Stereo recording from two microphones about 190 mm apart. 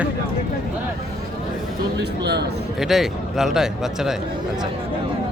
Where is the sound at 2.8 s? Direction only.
Centre (ahead or behind).